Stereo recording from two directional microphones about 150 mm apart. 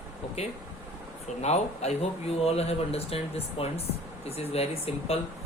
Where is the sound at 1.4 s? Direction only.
45° left (ahead or behind).